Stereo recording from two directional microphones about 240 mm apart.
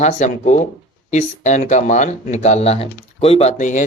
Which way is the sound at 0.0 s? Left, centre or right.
Left.